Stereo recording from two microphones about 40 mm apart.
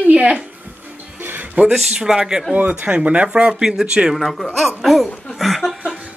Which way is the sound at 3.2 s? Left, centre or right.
Right.